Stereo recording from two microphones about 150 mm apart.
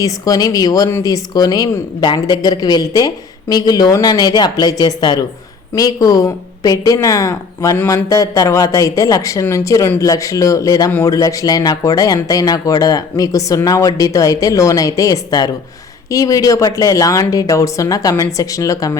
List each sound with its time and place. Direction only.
0.0 s speech: 25° left (ahead or behind)